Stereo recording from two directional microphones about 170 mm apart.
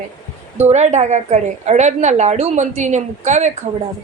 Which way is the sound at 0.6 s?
40° right (ahead or behind).